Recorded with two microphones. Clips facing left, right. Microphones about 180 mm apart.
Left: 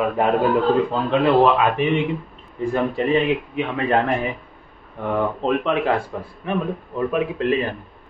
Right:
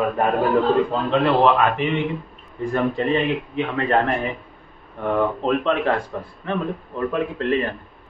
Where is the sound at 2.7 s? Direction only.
10° left (ahead or behind).